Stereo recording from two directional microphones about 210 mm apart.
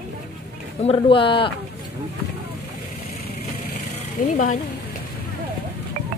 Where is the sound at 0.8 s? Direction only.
25° left (ahead or behind).